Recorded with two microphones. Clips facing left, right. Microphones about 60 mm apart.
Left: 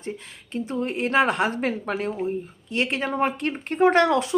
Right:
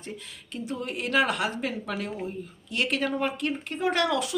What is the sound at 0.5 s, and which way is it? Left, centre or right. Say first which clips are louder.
Speech: left 6 dB; left.